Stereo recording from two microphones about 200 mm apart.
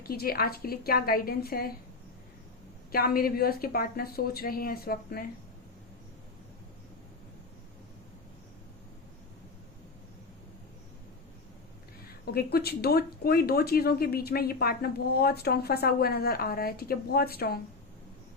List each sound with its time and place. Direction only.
0.0 s speech: 50° left (ahead or behind)
2.9 s speech: 50° left (ahead or behind)
12.2 s speech: 50° left (ahead or behind)